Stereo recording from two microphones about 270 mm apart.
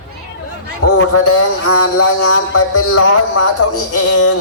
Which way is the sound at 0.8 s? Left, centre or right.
Left.